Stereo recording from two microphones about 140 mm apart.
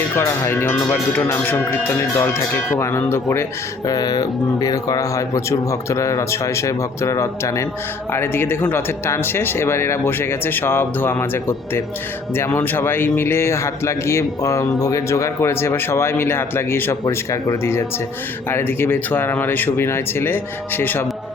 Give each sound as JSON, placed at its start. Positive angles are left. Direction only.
{"t": 0.2, "sound": "a man's voice", "side_deg": 20}